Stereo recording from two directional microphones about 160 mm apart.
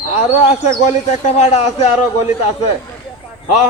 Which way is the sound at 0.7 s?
50° left (ahead or behind).